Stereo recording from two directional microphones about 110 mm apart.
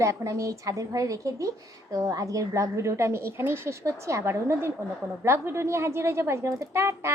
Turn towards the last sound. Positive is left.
turn(degrees=-25)  # may be behind; listen again after turning